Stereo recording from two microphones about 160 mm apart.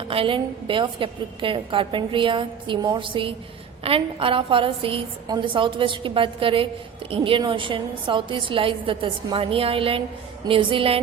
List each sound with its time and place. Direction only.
0.1 s a woman's voice: 35° right (ahead or behind)